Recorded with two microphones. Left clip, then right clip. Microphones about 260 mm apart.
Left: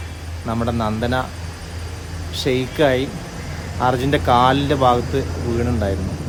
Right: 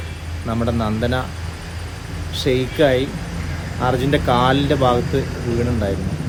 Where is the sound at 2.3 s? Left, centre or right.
Centre.